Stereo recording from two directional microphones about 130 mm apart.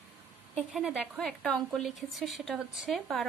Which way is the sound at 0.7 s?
5° right (ahead or behind).